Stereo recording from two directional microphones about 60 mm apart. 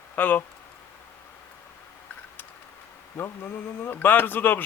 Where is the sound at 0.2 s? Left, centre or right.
Left.